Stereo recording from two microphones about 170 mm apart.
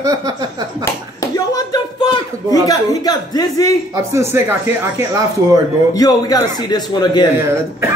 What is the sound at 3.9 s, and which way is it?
Speech, 15° right (ahead or behind).